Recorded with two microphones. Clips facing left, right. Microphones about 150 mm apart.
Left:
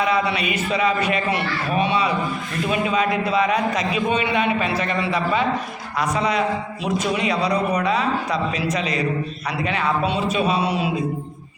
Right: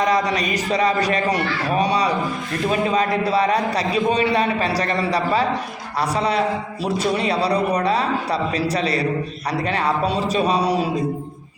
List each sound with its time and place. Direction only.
0.0 s a man's voice: 35° right (ahead or behind)